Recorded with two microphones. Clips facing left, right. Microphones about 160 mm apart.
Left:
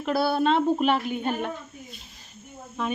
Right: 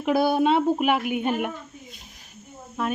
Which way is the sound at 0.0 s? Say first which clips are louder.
Right 3 dB; 15° right (ahead or behind).